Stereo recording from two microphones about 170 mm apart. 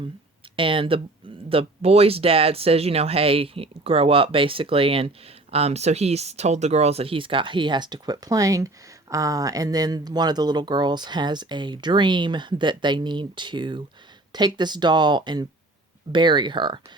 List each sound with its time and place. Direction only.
0.5 s speech: 30° right (ahead or behind)